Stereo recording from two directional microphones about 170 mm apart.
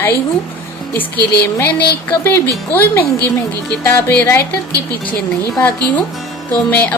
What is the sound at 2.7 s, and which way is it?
Speech, 10° left (ahead or behind).